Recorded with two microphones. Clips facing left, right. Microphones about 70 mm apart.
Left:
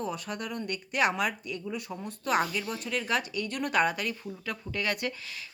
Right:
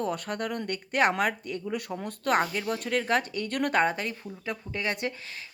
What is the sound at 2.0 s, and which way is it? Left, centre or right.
Speech, right.